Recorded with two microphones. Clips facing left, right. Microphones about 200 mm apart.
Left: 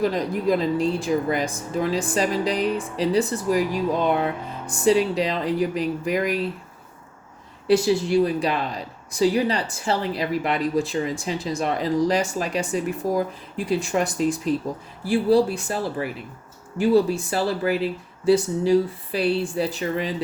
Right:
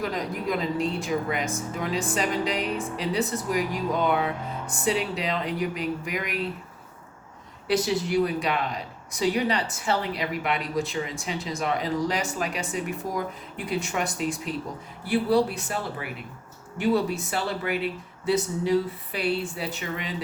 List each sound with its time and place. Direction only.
0.0 s speech: 30° left (ahead or behind)
7.7 s speech: 30° left (ahead or behind)